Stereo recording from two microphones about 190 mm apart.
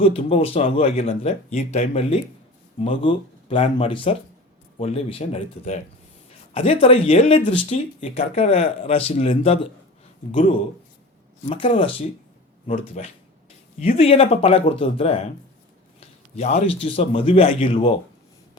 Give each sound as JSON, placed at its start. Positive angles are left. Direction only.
{"t": 0.0, "sound": "speech", "side_deg": 30}
{"t": 11.4, "sound": "a man's voice", "side_deg": 30}